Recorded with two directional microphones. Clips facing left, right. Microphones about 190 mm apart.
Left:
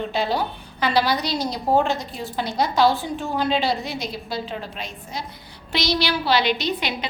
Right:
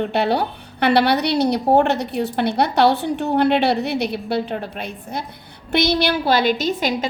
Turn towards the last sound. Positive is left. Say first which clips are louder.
# right 5 dB
turn(degrees=-45)  # may be behind; listen again after turning